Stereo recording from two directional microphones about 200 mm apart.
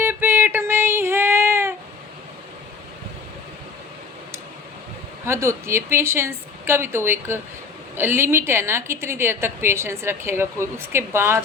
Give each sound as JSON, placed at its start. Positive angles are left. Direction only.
{"t": 0.0, "sound": "child singing", "side_deg": -10}
{"t": 5.2, "sound": "a woman's voice", "side_deg": -15}